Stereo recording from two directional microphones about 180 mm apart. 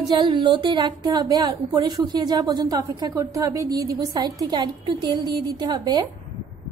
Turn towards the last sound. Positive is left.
turn(degrees=-25)  # may be behind; listen again after turning